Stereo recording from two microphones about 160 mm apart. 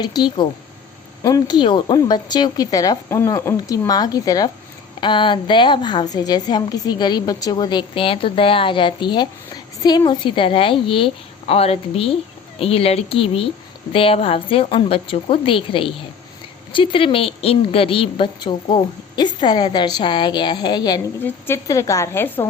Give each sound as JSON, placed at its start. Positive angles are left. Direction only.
{"t": 0.0, "sound": "a woman's voice", "side_deg": 25}
{"t": 21.2, "sound": "a woman's voice", "side_deg": 15}